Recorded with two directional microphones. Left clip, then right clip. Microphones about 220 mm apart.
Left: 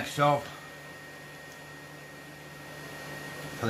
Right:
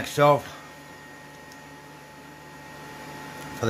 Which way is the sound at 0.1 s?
45° right (ahead or behind).